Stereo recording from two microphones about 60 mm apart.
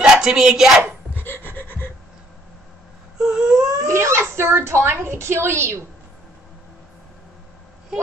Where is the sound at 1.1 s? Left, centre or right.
Left.